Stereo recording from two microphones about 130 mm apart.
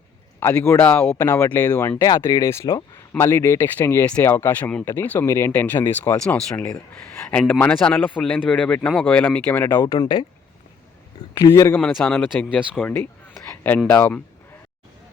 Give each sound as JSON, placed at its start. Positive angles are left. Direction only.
{"t": 0.3, "sound": "speech", "side_deg": 20}
{"t": 2.0, "sound": "speech", "side_deg": 25}
{"t": 9.7, "sound": "speech", "side_deg": 25}
{"t": 11.3, "sound": "speech", "side_deg": 25}
{"t": 11.7, "sound": "speech", "side_deg": 15}